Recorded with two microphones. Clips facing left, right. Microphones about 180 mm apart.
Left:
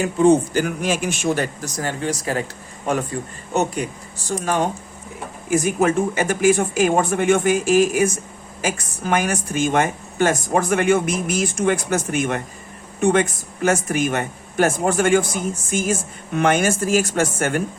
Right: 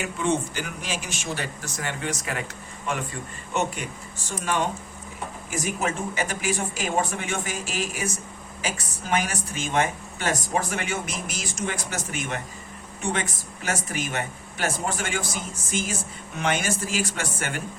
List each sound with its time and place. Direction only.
0.0 s speech: 35° left (ahead or behind); by 1.5 s 55° left (ahead or behind)
1.6 s speech: 35° left (ahead or behind)
3.5 s speech: 40° left (ahead or behind)